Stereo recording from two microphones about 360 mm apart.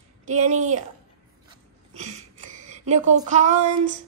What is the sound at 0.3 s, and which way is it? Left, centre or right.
Child singing, centre.